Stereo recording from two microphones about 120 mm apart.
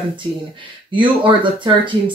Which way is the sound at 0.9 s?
45° right (ahead or behind).